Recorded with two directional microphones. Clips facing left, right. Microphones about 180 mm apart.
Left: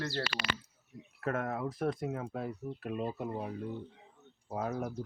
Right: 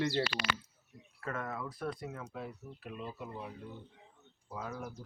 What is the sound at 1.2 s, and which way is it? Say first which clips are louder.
Speech: left 5 dB; 55° left (ahead or behind).